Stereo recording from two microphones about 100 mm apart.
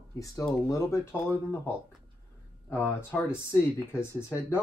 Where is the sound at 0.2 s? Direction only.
35° left (ahead or behind).